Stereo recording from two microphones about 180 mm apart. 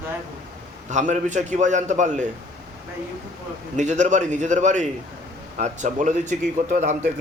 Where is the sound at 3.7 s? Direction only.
40° right (ahead or behind).